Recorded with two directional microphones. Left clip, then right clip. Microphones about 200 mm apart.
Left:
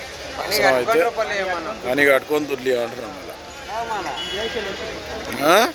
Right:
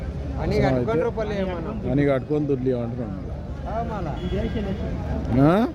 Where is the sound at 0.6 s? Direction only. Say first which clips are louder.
Left 7 dB; 55° right (ahead or behind).